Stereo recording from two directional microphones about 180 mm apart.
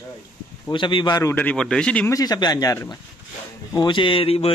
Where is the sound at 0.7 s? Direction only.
25° left (ahead or behind); by 2.1 s 5° left (ahead or behind).